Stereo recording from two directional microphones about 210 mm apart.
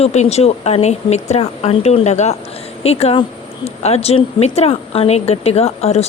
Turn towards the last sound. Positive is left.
turn(degrees=30)  # may be behind; listen again after turning